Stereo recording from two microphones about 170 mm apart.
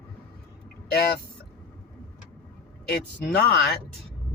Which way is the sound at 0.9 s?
70° left (ahead or behind).